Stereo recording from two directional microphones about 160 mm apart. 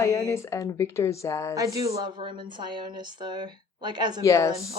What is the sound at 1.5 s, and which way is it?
Speech, 20° right (ahead or behind).